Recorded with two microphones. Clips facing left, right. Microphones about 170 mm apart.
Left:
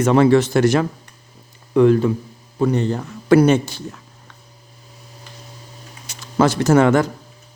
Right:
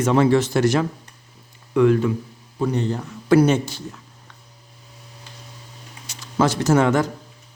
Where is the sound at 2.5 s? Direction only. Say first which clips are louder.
Left 4 dB; 65° left (ahead or behind).